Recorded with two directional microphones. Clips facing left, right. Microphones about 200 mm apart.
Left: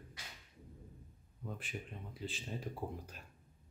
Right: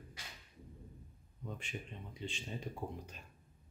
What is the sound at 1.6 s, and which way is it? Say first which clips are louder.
Speech: even; 5° left (ahead or behind).